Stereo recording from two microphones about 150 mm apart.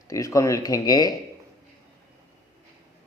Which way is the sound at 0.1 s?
20° left (ahead or behind).